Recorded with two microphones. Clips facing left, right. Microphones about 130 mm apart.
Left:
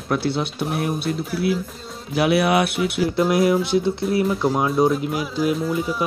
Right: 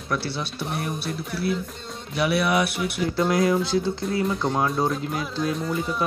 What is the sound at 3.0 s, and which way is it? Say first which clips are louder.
Speech: left 3 dB; 5° left (ahead or behind).